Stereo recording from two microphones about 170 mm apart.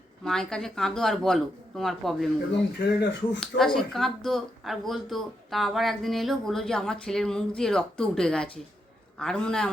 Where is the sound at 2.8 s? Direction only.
85° left.